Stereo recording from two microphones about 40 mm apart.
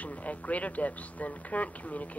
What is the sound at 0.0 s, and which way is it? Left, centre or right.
Speech, left.